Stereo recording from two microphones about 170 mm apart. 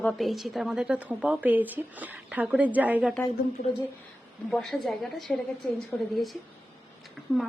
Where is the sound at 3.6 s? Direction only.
60° left (ahead or behind).